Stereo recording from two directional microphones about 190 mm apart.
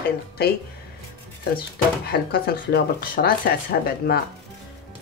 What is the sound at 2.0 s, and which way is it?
Speech, 55° left (ahead or behind).